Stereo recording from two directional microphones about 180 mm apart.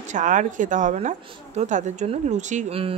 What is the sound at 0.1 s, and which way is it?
Speech, 45° right (ahead or behind).